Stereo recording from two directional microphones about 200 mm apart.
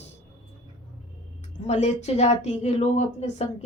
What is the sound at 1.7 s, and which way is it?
Speech, 35° left (ahead or behind).